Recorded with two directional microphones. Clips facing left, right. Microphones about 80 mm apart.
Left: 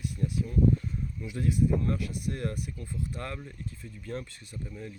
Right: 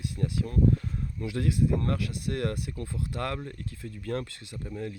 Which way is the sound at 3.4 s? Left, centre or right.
Right.